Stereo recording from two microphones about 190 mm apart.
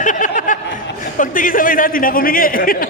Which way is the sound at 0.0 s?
40° left (ahead or behind).